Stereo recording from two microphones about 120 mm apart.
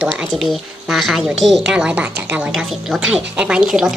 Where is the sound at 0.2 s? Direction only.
5° right (ahead or behind).